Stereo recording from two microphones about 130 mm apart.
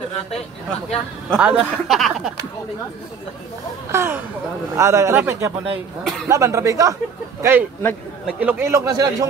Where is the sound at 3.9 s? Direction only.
20° right (ahead or behind).